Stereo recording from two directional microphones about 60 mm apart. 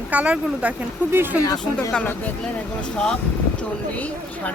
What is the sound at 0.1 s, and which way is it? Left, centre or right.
Speech, right.